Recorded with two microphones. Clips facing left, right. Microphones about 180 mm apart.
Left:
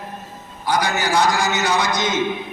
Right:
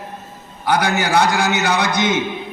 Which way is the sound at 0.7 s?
65° right (ahead or behind).